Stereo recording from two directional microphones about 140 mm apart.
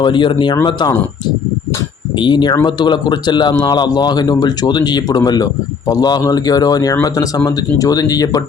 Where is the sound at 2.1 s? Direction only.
35° left (ahead or behind).